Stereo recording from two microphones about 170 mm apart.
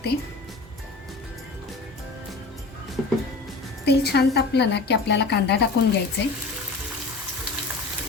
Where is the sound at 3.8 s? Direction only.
75° left (ahead or behind).